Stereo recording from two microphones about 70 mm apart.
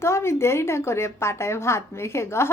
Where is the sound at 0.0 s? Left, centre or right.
Left.